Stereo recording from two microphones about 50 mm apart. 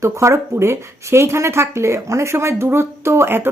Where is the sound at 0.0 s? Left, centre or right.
Right.